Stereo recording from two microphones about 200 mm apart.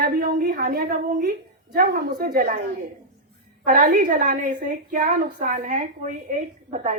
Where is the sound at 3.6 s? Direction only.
45° right (ahead or behind).